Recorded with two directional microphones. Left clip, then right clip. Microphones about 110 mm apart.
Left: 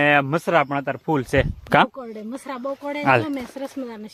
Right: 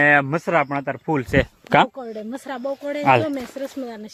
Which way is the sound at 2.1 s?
15° left (ahead or behind).